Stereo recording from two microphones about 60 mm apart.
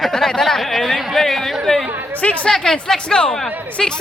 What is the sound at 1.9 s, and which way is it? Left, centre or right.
Speech, right.